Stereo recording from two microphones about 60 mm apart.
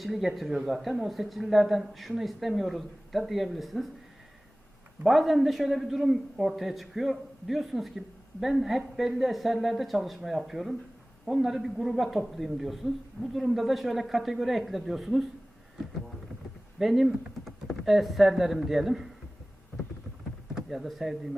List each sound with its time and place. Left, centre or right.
0.0 s a man's voice: centre
5.0 s a man's voice: centre
16.7 s a man's voice: centre
20.7 s a man's voice: centre